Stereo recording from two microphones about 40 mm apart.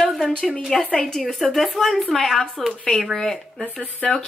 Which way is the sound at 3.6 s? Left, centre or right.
Left.